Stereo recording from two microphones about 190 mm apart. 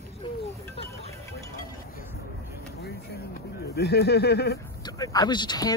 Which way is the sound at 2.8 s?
55° left (ahead or behind).